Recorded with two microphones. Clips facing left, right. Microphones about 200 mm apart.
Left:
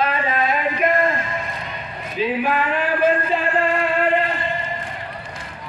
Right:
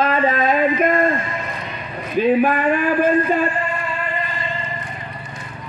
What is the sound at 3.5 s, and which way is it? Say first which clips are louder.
Music: left 5 dB; 75° left (ahead or behind).